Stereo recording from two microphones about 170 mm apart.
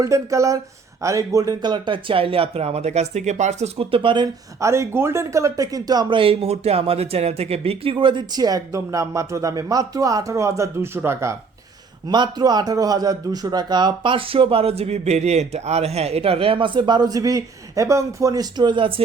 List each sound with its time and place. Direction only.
0.0 s a man's voice: 20° right (ahead or behind)
4.6 s a man's voice: 15° right (ahead or behind); by 19.0 s 30° right (ahead or behind)